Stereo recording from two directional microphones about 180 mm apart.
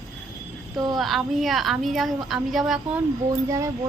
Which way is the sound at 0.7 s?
20° right (ahead or behind).